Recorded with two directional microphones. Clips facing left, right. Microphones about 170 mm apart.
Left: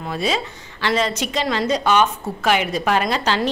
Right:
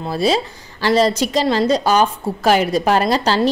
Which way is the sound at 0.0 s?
35° right (ahead or behind).